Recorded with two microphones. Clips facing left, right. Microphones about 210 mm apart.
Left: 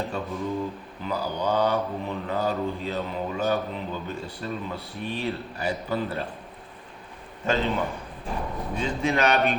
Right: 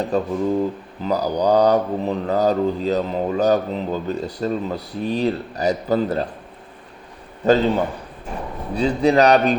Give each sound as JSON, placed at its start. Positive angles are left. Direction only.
{"t": 0.0, "sound": "speech", "side_deg": -40}
{"t": 7.4, "sound": "speech", "side_deg": -40}
{"t": 8.7, "sound": "speech", "side_deg": -35}